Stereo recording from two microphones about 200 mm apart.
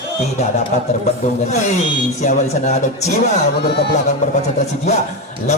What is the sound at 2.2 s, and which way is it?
Speech, 35° left (ahead or behind).